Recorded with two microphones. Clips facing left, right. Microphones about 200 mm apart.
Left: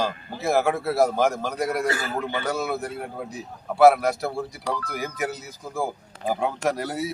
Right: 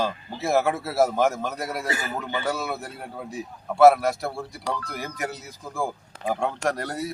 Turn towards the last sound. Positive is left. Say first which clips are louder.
# left 2 dB
turn(degrees=5)  # may be behind; listen again after turning